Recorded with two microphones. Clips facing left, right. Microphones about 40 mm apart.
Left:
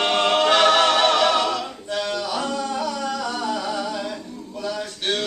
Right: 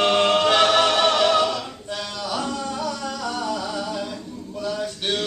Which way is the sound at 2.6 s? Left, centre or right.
Centre.